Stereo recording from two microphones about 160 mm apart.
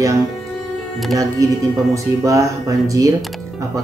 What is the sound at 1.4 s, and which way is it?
Speech, 20° right (ahead or behind).